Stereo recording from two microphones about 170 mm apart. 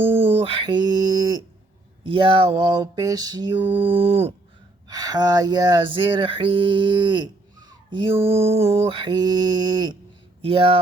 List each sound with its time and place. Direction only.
0.0 s mantra: 35° right (ahead or behind)
2.0 s speech: 30° right (ahead or behind)
3.8 s mantra: 30° right (ahead or behind)
4.9 s speech: 25° right (ahead or behind)
10.4 s mantra: 35° right (ahead or behind)